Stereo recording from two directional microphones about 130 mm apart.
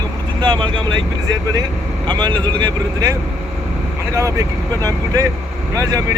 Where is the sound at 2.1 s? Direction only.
35° right (ahead or behind).